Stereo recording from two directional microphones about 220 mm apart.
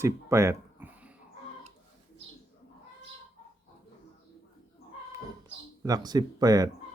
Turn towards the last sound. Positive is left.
turn(degrees=-15)  # may be behind; listen again after turning